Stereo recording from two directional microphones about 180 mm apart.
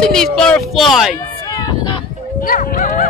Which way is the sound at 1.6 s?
25° left (ahead or behind).